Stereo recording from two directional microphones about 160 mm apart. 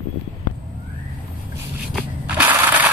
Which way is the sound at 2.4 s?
10° right (ahead or behind).